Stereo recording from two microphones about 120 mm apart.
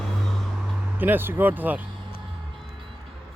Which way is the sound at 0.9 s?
15° right (ahead or behind).